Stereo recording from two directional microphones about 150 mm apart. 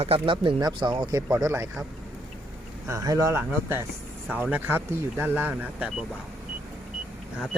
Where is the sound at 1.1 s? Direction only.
20° right (ahead or behind).